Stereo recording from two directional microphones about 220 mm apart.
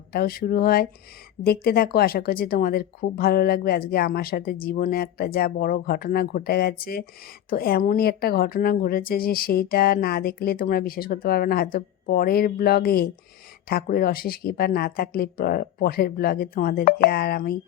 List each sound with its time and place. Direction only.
0.1 s speech: 45° left (ahead or behind)